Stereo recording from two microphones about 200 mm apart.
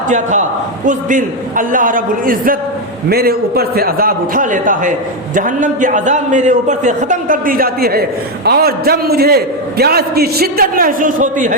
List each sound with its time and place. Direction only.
0.1 s a man's voice: 35° right (ahead or behind)